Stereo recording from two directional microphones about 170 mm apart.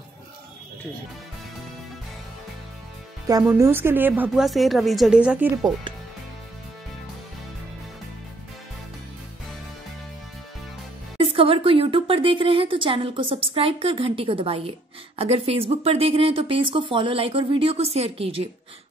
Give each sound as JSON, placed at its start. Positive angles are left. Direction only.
{"t": 3.5, "sound": "speech", "side_deg": -15}
{"t": 4.5, "sound": "speech", "side_deg": 0}
{"t": 11.1, "sound": "speech", "side_deg": -35}